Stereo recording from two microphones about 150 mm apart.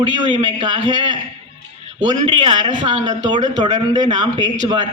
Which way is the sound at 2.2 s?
35° right (ahead or behind).